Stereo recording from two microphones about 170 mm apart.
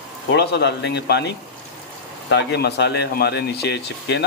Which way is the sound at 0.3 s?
80° left.